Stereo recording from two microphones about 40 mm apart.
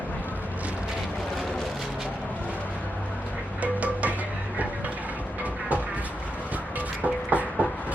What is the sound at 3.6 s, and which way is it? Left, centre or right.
Music, right.